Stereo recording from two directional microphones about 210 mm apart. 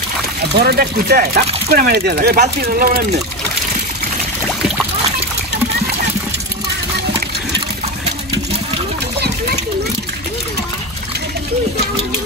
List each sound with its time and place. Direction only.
0.6 s speech: 45° right (ahead or behind)